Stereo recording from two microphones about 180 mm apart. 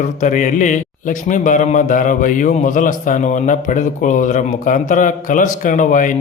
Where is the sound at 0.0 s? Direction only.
45° left (ahead or behind).